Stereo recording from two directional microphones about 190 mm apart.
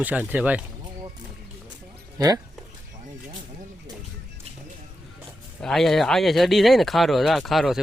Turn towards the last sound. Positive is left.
turn(degrees=0)  # may be behind; listen again after turning